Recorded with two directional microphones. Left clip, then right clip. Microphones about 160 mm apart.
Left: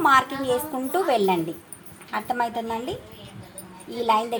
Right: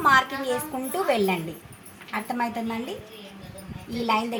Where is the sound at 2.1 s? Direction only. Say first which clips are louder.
Left 3 dB; 30° left (ahead or behind).